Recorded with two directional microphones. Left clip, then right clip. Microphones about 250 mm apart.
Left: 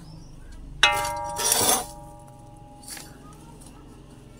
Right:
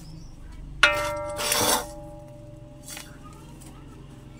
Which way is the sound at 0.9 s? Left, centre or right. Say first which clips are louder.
Left 1 dB; centre.